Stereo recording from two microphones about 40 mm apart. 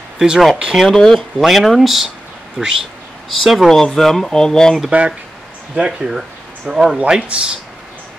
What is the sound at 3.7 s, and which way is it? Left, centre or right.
Speech, centre.